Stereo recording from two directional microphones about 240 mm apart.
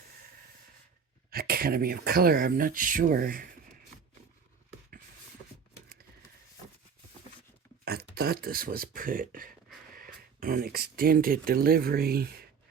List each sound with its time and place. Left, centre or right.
1.3 s speech: right
7.9 s speech: right